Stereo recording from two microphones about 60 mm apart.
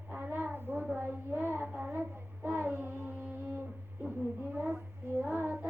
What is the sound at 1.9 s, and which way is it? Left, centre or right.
Child singing, right.